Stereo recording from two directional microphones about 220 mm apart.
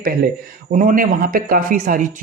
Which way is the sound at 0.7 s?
35° right (ahead or behind).